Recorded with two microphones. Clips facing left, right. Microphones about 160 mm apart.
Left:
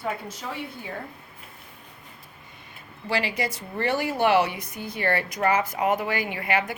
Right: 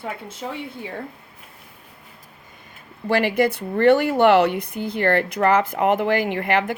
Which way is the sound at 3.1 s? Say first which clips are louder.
Right 8 dB; 55° right (ahead or behind).